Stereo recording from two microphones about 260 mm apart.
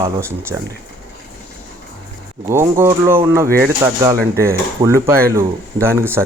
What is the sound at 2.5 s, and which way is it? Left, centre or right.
Speech, centre.